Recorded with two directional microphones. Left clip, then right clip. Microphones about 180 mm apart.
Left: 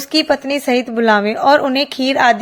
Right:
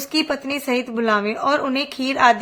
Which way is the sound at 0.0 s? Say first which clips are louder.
Left 7 dB; 20° left (ahead or behind).